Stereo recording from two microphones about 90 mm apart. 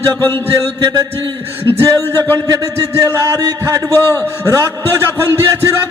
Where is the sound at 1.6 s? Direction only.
30° right (ahead or behind).